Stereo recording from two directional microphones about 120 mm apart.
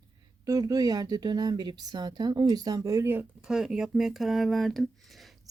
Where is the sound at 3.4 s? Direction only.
5° right (ahead or behind).